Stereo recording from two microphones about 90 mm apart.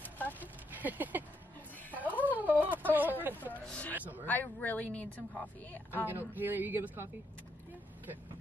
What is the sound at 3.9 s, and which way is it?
Speech, 20° right (ahead or behind).